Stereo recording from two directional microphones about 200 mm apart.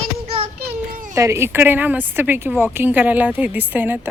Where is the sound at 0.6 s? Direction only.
45° right (ahead or behind).